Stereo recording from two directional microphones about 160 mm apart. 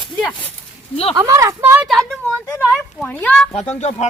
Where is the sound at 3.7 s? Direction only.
45° left (ahead or behind).